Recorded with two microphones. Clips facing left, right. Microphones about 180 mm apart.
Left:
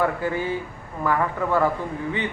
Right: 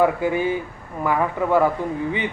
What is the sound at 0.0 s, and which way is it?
Speech, 15° right (ahead or behind).